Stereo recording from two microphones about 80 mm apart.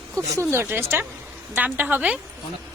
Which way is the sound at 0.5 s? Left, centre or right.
Right.